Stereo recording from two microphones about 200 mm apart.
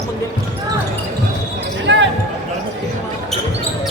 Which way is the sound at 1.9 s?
65° right (ahead or behind).